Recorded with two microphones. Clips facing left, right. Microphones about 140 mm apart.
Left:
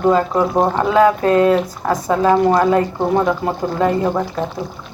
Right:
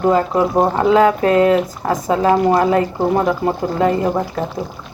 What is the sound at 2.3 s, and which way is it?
Speech, 5° right (ahead or behind).